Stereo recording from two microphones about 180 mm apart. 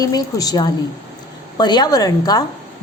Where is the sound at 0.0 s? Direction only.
20° left (ahead or behind).